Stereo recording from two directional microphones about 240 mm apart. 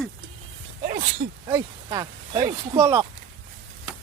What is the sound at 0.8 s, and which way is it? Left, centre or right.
Speech, right.